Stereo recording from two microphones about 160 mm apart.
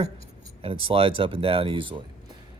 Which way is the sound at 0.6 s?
35° right (ahead or behind).